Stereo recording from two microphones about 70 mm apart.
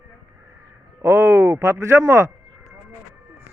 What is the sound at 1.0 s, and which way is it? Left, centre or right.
Speech, right.